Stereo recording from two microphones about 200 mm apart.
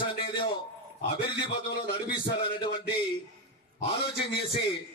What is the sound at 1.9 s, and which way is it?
Speech, 25° left (ahead or behind).